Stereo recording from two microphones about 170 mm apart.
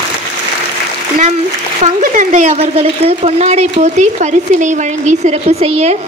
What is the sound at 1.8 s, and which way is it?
Speech, 45° right (ahead or behind).